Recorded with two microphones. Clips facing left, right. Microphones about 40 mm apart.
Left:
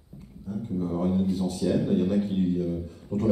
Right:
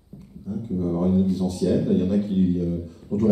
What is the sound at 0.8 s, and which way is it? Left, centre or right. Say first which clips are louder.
A man's voice: right 5 dB; centre.